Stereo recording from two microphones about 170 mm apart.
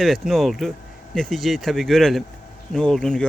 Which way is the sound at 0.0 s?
Centre (ahead or behind).